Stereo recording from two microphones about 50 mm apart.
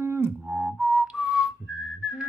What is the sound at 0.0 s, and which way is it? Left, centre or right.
Music, right.